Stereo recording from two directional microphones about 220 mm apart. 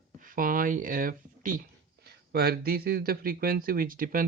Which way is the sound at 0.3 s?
40° right (ahead or behind).